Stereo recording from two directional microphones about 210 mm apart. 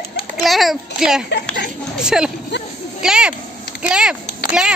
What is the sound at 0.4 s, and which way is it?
A child's voice, centre (ahead or behind).